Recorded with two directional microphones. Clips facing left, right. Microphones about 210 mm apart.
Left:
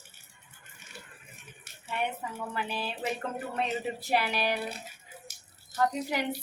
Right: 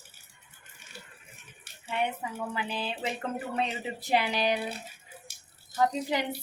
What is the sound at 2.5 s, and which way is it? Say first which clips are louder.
Speech: left 1 dB; 15° right (ahead or behind).